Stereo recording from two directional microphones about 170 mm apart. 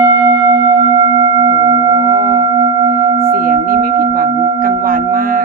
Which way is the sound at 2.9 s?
55° right (ahead or behind).